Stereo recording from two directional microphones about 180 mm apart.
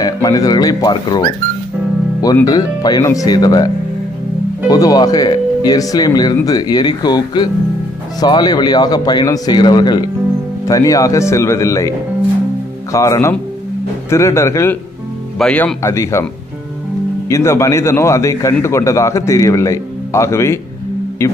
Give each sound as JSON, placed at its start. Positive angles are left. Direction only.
{"t": 0.0, "sound": "a man's voice", "side_deg": 20}
{"t": 12.9, "sound": "a man's voice", "side_deg": 15}
{"t": 17.3, "sound": "a man's voice", "side_deg": 15}